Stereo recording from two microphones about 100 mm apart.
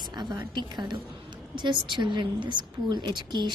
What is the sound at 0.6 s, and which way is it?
A woman's voice, 50° right (ahead or behind).